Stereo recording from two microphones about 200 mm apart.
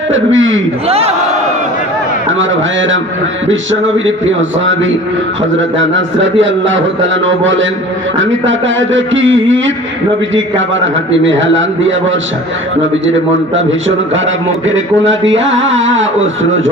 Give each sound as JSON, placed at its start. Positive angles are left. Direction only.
{"t": 0.1, "sound": "a man's voice", "side_deg": -75}
{"t": 0.9, "sound": "speech", "side_deg": -30}
{"t": 2.4, "sound": "a man's voice", "side_deg": -70}
{"t": 11.1, "sound": "a man's voice", "side_deg": -70}
{"t": 13.6, "sound": "a man's voice", "side_deg": -70}
{"t": 15.2, "sound": "a man's voice", "side_deg": -65}